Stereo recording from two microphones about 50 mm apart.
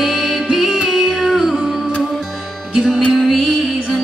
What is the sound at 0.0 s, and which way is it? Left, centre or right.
Music, centre.